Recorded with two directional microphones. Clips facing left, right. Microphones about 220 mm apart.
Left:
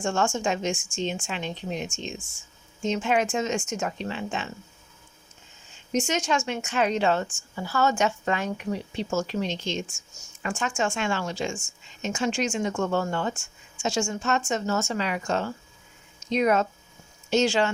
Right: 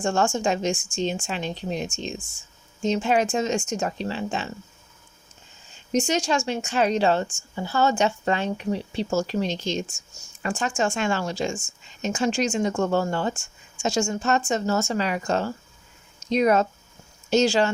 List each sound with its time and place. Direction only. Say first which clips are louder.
0.0 s speech: right 3 dB; 35° right (ahead or behind)
5.9 s speech: right 3 dB; 30° right (ahead or behind)